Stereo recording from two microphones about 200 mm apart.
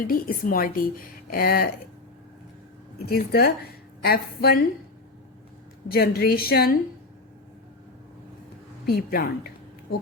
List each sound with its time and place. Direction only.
0.0 s speech: 45° left (ahead or behind)
3.1 s speech: 50° left (ahead or behind)
5.9 s speech: 50° left (ahead or behind)
8.9 s speech: 50° left (ahead or behind)